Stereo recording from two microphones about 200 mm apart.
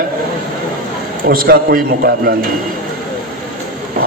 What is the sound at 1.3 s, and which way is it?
A man's voice, 45° right (ahead or behind).